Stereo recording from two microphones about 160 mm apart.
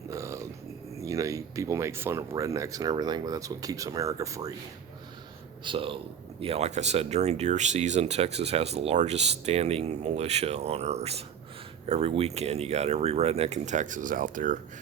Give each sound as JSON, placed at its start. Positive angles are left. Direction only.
{"t": 0.1, "sound": "a sound", "side_deg": -20}
{"t": 0.9, "sound": "speech", "side_deg": -20}
{"t": 5.6, "sound": "speech", "side_deg": -35}